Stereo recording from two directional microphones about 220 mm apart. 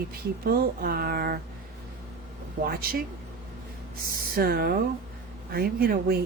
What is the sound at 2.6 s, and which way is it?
Speech, 40° right (ahead or behind).